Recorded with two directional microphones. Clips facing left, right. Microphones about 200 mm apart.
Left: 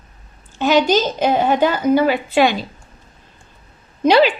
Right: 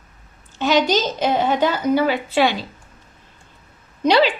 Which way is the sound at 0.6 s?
50° left (ahead or behind).